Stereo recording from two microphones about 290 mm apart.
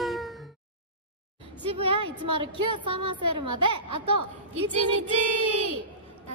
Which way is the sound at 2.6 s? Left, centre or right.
Right.